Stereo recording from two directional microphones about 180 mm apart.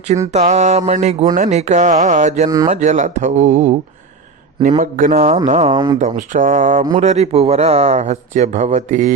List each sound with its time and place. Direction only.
0.3 s speech: 40° right (ahead or behind)
4.8 s speech: 50° right (ahead or behind)
5.7 s speech: 25° right (ahead or behind)
6.0 s speech: 40° right (ahead or behind)